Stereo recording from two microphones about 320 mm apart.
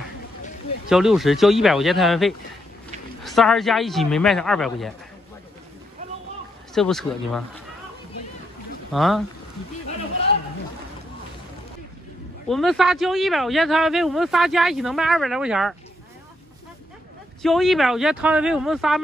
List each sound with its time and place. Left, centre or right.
0.8 s speech: centre
6.7 s speech: centre
8.9 s speech: centre
12.4 s speech: centre
17.4 s speech: centre